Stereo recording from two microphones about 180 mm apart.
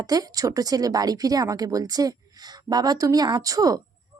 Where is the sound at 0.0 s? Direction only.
20° right (ahead or behind).